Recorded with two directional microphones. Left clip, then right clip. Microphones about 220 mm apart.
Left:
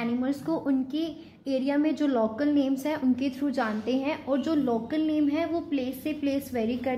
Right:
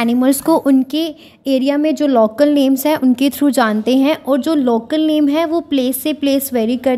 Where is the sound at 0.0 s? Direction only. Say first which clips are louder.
Right 15 dB; 50° right (ahead or behind).